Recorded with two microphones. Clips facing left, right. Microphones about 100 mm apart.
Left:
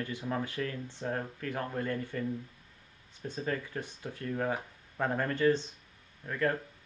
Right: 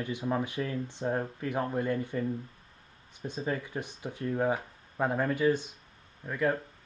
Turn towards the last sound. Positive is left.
turn(degrees=-15)  # may be behind; listen again after turning